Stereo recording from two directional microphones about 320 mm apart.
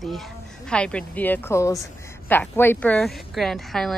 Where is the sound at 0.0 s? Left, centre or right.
Centre.